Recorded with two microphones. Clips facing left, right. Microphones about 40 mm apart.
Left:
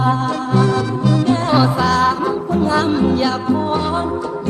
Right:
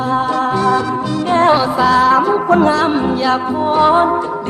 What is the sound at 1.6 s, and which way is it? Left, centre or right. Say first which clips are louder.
Music: right 2 dB; centre.